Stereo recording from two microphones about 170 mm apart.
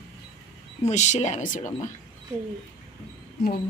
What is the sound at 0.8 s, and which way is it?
Speech, 45° left (ahead or behind).